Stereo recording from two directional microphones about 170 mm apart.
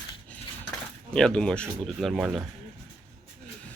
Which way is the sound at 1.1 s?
5° left (ahead or behind).